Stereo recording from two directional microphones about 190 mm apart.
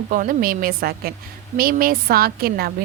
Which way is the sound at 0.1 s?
45° right (ahead or behind).